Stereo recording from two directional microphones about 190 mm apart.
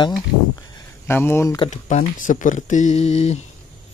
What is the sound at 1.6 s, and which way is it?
Speech, 35° left (ahead or behind).